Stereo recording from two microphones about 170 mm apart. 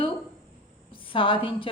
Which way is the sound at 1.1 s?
30° left (ahead or behind).